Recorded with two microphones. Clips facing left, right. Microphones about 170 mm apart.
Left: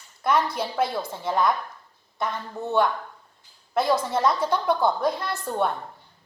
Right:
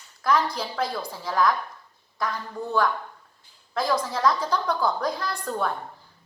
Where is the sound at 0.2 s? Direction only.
25° left (ahead or behind).